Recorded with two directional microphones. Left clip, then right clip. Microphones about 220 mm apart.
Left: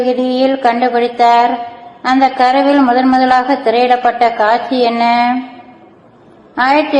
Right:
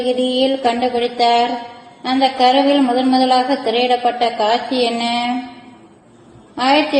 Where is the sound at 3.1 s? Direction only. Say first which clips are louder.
Left 4 dB; 10° left (ahead or behind).